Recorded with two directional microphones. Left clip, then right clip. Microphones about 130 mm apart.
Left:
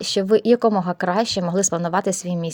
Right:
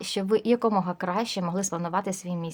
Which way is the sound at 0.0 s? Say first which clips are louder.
Left 8 dB; 35° left (ahead or behind).